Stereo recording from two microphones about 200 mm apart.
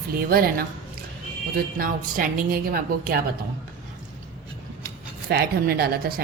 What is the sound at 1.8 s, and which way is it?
A woman's voice, 45° right (ahead or behind).